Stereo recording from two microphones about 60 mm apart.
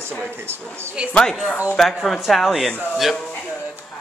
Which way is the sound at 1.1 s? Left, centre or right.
Centre.